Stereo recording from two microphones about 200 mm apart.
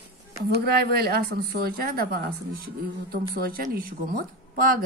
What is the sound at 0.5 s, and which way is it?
A woman's voice, 50° right (ahead or behind).